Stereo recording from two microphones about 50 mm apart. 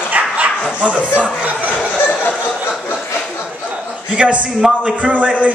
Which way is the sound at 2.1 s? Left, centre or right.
Left.